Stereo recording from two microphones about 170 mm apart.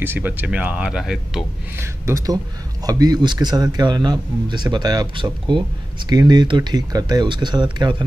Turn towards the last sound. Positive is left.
turn(degrees=-25)  # may be behind; listen again after turning